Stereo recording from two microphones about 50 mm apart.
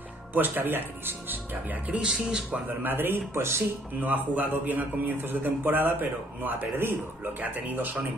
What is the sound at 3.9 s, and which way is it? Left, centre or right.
A man's voice, right.